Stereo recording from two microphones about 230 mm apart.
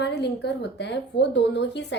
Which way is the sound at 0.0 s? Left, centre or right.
Left.